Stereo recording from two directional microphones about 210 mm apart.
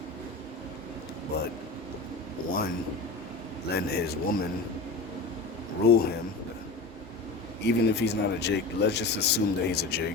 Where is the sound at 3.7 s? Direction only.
50° left (ahead or behind).